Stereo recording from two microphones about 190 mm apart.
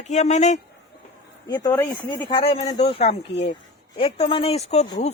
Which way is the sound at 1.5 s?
15° left (ahead or behind).